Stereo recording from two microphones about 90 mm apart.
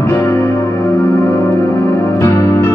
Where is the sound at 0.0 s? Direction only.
25° left (ahead or behind).